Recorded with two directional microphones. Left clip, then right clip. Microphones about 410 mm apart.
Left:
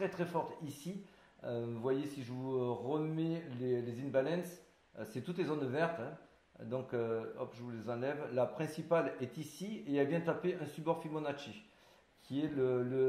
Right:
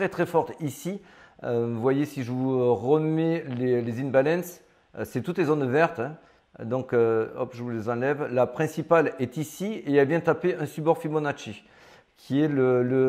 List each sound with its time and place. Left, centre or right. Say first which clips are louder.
0.0 s a man's voice: right 12 dB; right
1.4 s a man's voice: right 14 dB; right